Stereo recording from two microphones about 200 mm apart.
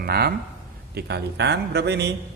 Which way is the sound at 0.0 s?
50° right (ahead or behind).